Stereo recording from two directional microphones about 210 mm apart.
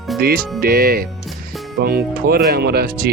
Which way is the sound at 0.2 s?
45° right (ahead or behind).